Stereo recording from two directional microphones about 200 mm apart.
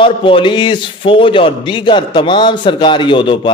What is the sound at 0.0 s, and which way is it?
Speech, 25° left (ahead or behind).